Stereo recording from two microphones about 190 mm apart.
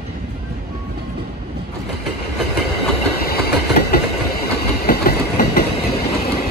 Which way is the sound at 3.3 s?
55° left (ahead or behind).